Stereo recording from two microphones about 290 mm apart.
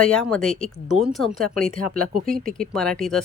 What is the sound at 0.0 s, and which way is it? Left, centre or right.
Speech, centre.